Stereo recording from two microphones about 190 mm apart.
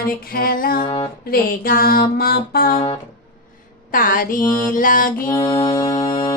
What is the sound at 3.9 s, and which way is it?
Female singing, 45° left (ahead or behind).